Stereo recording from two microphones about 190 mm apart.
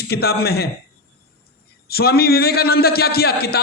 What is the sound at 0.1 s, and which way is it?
Speech, 55° left (ahead or behind).